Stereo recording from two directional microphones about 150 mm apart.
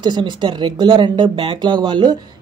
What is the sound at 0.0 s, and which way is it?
Speech, 30° right (ahead or behind).